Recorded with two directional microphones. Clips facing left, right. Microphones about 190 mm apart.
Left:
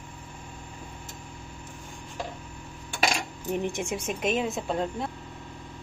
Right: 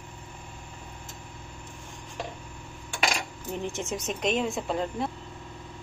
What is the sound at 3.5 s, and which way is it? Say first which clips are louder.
Speech: left 2 dB; 15° left (ahead or behind).